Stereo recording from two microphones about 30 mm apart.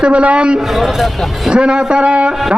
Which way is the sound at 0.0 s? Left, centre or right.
Right.